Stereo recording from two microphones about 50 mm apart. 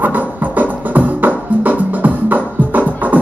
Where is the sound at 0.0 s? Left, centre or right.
Right.